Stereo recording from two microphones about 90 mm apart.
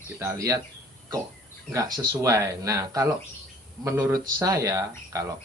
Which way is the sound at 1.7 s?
40° right (ahead or behind).